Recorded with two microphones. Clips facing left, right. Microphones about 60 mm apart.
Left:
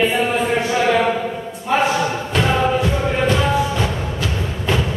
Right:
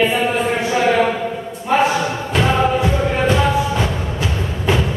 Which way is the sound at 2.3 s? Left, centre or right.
Centre.